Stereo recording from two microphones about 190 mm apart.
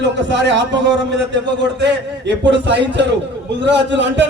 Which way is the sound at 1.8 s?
65° right (ahead or behind).